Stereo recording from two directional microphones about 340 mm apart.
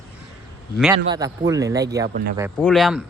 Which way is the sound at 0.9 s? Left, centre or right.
Centre.